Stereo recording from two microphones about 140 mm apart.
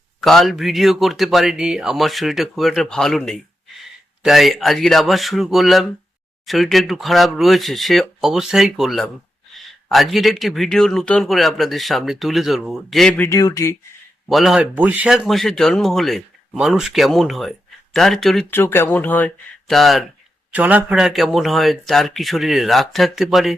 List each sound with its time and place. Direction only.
0.2 s speech: centre (ahead or behind)
13.1 s speech: 20° left (ahead or behind)
14.3 s speech: centre (ahead or behind)
18.5 s speech: 15° left (ahead or behind)
19.7 s speech: centre (ahead or behind)
20.5 s speech: 10° right (ahead or behind)